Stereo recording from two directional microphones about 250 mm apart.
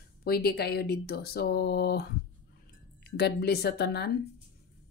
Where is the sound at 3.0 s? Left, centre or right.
Left.